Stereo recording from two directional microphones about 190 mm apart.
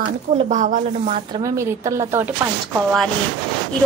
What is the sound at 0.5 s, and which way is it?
Speech, 40° right (ahead or behind).